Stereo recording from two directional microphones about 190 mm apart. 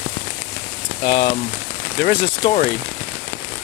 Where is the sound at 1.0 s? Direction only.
25° left (ahead or behind).